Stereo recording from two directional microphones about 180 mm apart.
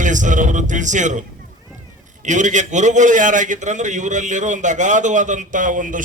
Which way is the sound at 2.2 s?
45° right (ahead or behind).